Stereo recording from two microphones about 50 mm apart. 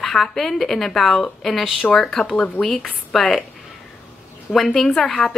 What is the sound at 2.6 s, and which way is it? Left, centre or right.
Speech, left.